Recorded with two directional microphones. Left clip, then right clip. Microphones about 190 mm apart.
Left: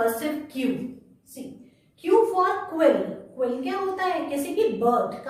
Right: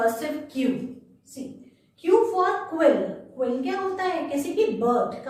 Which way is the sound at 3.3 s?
15° left (ahead or behind).